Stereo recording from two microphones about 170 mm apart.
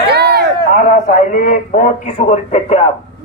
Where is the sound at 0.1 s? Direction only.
70° right (ahead or behind).